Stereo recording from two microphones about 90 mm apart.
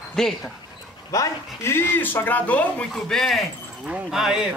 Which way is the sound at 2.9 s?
5° left (ahead or behind).